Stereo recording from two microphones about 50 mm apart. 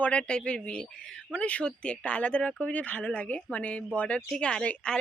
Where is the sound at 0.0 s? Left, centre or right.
Left.